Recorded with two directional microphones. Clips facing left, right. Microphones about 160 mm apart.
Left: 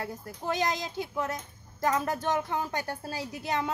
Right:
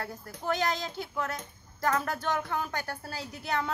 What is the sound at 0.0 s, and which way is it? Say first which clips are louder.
A woman's voice: left 1 dB; 15° left (ahead or behind).